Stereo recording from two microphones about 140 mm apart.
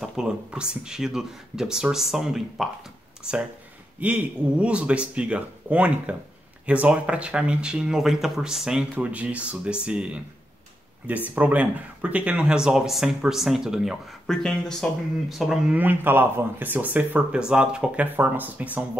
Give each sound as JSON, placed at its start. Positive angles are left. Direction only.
{"t": 0.0, "sound": "speech", "side_deg": -5}
{"t": 4.0, "sound": "speech", "side_deg": -10}